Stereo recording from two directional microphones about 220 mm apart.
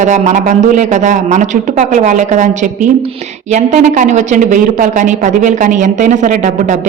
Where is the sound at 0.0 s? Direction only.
35° right (ahead or behind).